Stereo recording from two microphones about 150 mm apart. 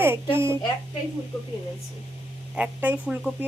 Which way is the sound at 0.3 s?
20° right (ahead or behind).